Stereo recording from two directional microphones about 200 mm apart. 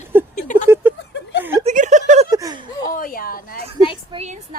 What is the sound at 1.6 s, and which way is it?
Chuckle, 35° right (ahead or behind).